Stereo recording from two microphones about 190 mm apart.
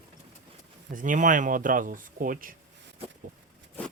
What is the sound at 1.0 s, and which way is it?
Speech, 40° right (ahead or behind).